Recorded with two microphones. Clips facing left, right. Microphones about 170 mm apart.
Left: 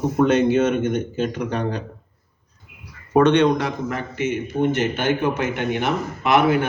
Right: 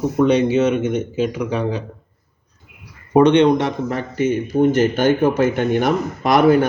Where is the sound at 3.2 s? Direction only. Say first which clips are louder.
Right 3 dB; 20° right (ahead or behind).